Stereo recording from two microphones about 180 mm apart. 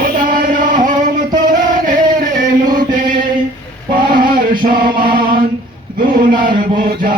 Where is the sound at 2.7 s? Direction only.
50° right (ahead or behind).